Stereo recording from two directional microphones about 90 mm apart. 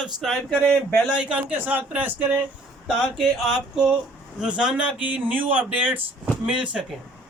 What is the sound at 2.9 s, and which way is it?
A man's voice, 5° right (ahead or behind).